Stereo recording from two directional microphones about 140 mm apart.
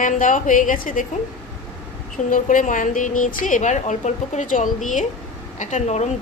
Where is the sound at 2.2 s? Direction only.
70° left (ahead or behind).